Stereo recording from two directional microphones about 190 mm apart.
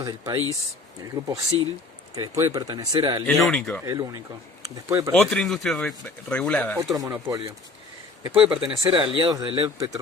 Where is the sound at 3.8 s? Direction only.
20° right (ahead or behind).